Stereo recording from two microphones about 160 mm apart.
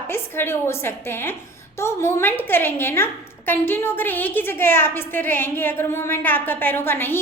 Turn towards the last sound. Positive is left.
turn(degrees=15)  # may be behind; listen again after turning